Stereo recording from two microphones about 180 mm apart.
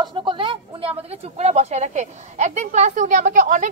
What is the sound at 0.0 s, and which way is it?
A woman's voice, 25° right (ahead or behind).